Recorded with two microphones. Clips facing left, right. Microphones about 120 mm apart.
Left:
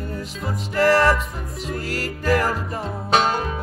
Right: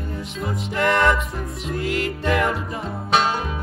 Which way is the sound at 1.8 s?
40° left (ahead or behind).